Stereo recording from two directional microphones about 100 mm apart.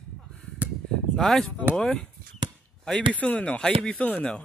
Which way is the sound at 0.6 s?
15° right (ahead or behind).